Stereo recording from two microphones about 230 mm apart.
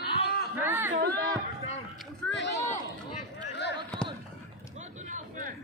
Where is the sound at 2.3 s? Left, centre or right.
Left.